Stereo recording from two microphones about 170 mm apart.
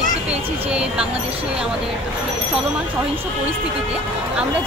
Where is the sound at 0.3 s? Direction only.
5° right (ahead or behind).